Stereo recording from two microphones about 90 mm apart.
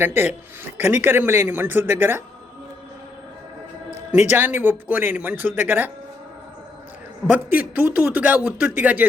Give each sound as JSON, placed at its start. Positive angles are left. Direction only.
{"t": 0.0, "sound": "speech", "side_deg": -25}
{"t": 4.1, "sound": "speech", "side_deg": -20}
{"t": 7.3, "sound": "speech", "side_deg": -20}